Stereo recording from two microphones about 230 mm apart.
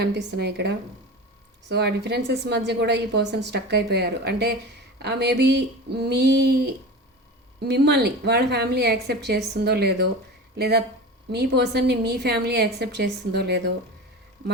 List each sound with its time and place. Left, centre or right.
0.0 s a woman's voice: right
1.7 s a woman's voice: right